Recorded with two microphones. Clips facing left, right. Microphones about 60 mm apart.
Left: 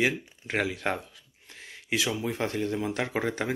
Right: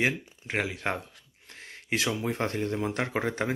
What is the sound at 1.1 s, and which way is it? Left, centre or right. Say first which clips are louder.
Speech: even; right.